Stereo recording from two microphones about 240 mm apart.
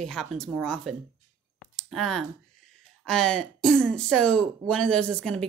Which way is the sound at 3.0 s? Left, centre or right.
Centre.